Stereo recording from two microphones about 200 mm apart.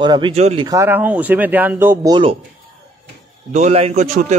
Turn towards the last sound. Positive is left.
turn(degrees=-35)  # may be behind; listen again after turning